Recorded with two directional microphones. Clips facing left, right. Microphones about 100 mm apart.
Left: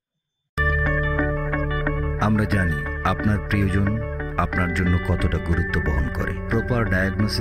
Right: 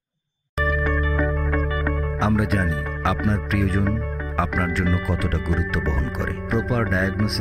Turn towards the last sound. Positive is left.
turn(degrees=0)  # may be behind; listen again after turning